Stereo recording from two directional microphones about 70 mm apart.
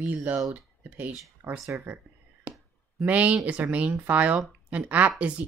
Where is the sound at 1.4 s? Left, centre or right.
Right.